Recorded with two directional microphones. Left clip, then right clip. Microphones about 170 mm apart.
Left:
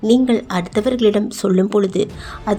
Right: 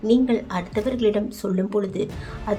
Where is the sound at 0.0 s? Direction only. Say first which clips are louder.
Left 5 dB; 35° left (ahead or behind).